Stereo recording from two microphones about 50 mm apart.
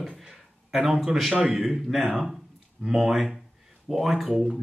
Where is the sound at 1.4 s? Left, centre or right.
Centre.